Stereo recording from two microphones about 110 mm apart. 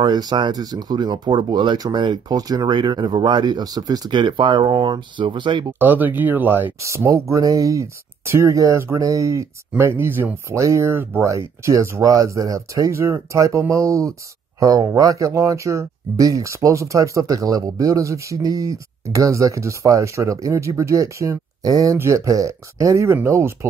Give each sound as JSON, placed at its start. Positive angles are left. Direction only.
{"t": 0.0, "sound": "speech", "side_deg": -40}
{"t": 5.7, "sound": "speech", "side_deg": -15}